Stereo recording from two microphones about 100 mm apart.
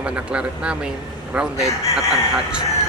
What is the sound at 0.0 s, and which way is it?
A man's voice, 10° right (ahead or behind).